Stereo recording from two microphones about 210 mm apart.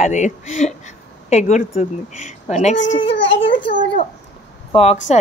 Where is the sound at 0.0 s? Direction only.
35° left (ahead or behind).